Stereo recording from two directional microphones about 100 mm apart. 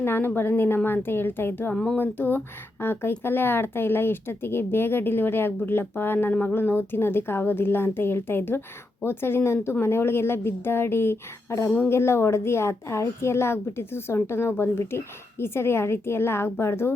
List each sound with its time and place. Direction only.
0.0 s speech: 20° left (ahead or behind)
1.7 s a sound: 10° left (ahead or behind)
2.0 s speech: 20° left (ahead or behind)